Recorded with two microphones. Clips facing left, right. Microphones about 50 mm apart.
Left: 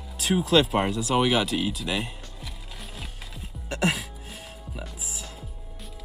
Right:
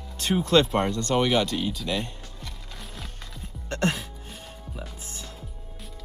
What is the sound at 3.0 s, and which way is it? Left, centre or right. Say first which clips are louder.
Music: even; centre.